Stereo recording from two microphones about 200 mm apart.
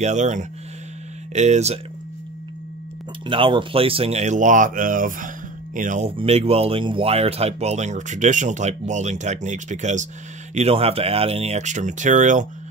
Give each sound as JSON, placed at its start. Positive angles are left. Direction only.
{"t": 0.0, "sound": "speech", "side_deg": -35}
{"t": 3.3, "sound": "speech", "side_deg": -25}